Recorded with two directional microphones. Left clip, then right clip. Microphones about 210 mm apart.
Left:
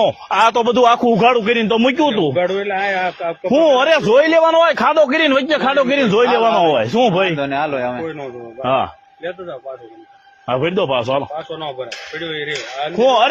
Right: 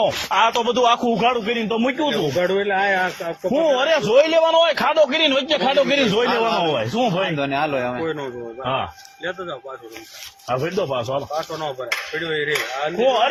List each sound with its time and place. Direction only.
0.0 s a man's voice: 50° left (ahead or behind)
2.4 s a man's voice: 15° left (ahead or behind)
3.5 s a man's voice: 50° left (ahead or behind)
7.3 s a man's voice: 25° left (ahead or behind)
8.6 s speech: 55° left (ahead or behind)
10.5 s a man's voice: 50° left (ahead or behind)
12.1 s speech: 5° left (ahead or behind)
13.0 s a man's voice: 50° left (ahead or behind)